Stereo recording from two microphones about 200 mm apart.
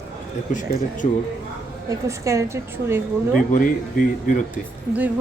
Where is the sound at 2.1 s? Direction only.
15° right (ahead or behind).